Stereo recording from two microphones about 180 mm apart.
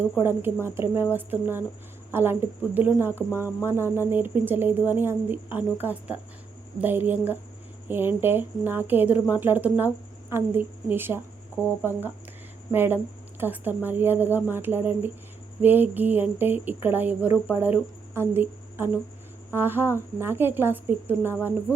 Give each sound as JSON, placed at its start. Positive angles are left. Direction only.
{"t": 0.2, "sound": "speech", "side_deg": -15}
{"t": 11.6, "sound": "speech", "side_deg": 15}
{"t": 12.7, "sound": "speech", "side_deg": -10}